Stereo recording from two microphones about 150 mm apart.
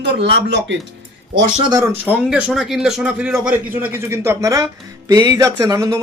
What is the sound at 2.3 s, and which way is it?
A man's voice, 5° right (ahead or behind).